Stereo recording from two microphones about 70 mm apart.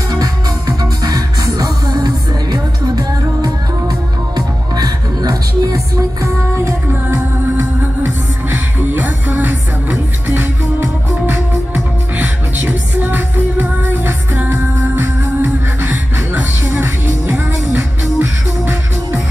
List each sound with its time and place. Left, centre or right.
0.1 s music: right
7.1 s music: right